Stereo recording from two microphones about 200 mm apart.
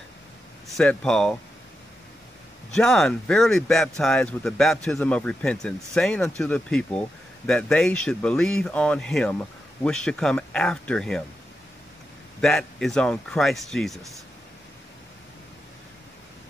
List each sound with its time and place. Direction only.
0.7 s speech: 5° left (ahead or behind)
2.7 s speech: 5° left (ahead or behind)
12.4 s speech: 5° left (ahead or behind)